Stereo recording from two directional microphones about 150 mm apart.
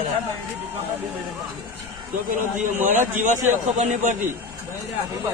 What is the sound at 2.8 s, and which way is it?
A man's voice, 60° right (ahead or behind).